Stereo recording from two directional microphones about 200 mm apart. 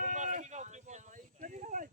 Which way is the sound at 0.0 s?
35° right (ahead or behind).